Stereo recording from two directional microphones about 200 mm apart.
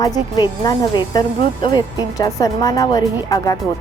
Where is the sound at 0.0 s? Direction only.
20° left (ahead or behind).